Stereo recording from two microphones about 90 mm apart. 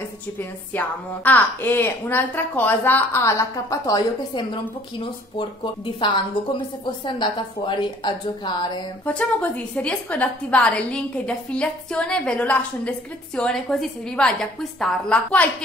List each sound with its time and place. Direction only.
0.7 s a woman's voice: 20° left (ahead or behind)
5.9 s a woman's voice: 65° left (ahead or behind)
9.0 s a woman's voice: 15° left (ahead or behind)